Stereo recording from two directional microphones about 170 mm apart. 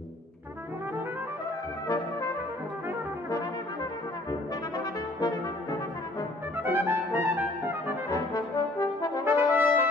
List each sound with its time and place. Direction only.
1.9 s brass instrument: 20° left (ahead or behind)
4.3 s brass instrument: 20° left (ahead or behind)
6.5 s music: 10° right (ahead or behind)
8.1 s brass instrument: 20° left (ahead or behind)
9.2 s brass instrument: 10° right (ahead or behind)